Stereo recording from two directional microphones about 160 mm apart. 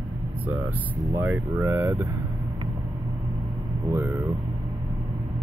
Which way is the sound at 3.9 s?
15° right (ahead or behind).